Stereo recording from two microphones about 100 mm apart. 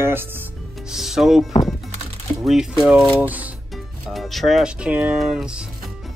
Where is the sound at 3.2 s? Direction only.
15° right (ahead or behind).